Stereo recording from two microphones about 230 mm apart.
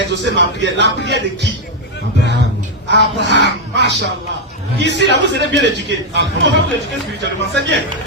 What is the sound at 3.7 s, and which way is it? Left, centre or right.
Music, right.